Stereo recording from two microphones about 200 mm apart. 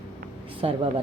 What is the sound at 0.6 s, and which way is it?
Speech, 30° right (ahead or behind).